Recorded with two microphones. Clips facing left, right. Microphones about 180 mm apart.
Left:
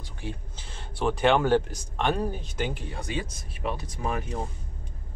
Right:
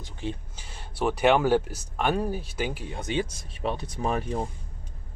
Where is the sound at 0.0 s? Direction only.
20° right (ahead or behind).